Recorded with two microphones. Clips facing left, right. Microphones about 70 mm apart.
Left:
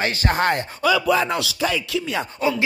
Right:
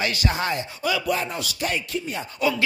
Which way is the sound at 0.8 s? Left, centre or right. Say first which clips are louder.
Left 6 dB; left.